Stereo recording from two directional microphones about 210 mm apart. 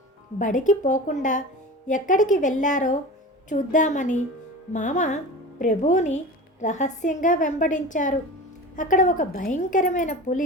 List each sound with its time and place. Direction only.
0.3 s speech: 40° left (ahead or behind)